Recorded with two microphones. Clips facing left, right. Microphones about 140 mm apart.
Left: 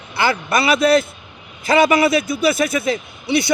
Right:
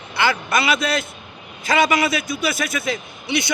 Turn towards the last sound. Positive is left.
turn(degrees=30)  # may be behind; listen again after turning